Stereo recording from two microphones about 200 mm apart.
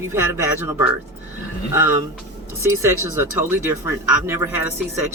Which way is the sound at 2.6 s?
10° right (ahead or behind).